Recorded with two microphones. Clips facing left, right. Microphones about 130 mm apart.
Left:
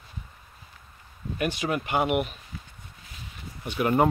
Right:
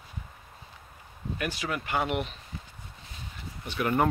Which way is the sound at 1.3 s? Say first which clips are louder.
Left 5 dB; 20° left (ahead or behind).